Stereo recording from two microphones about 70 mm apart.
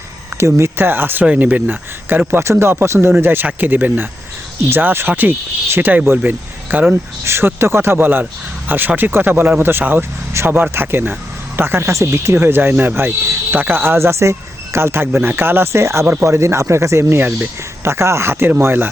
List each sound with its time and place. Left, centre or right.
0.3 s speech: right
2.4 s speech: right
7.3 s speech: right
17.8 s speech: right